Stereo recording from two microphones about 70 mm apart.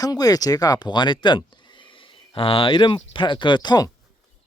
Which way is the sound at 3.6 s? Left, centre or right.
Left.